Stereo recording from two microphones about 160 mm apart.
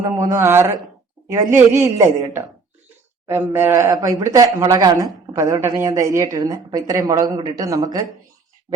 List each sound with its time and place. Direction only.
0.0 s a woman's voice: 20° right (ahead or behind)